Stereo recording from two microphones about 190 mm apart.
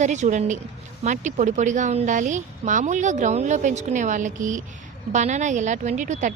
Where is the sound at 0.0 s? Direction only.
40° right (ahead or behind).